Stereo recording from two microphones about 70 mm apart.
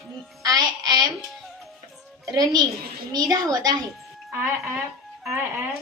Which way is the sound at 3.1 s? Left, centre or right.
Right.